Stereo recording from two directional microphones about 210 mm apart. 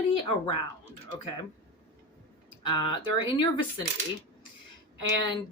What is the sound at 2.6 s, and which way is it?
Speech, 20° left (ahead or behind).